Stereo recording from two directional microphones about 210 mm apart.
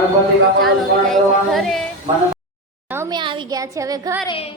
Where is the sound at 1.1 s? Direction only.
Centre (ahead or behind).